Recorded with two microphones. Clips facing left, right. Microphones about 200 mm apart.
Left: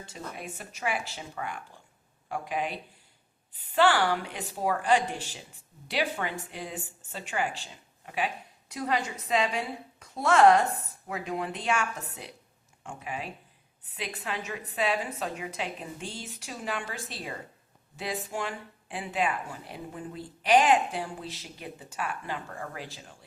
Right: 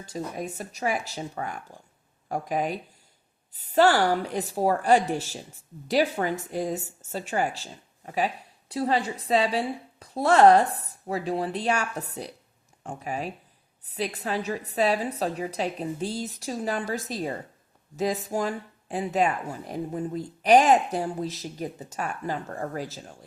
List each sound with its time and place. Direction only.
0.0 s speech: 40° right (ahead or behind)